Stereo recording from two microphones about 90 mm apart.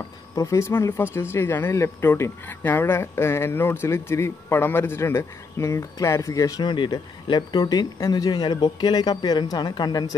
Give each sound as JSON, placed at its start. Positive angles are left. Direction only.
{"t": 0.4, "sound": "speech", "side_deg": 35}
{"t": 6.6, "sound": "speech", "side_deg": 60}